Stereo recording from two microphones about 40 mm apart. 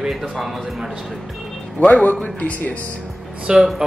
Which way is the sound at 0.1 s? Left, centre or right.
Centre.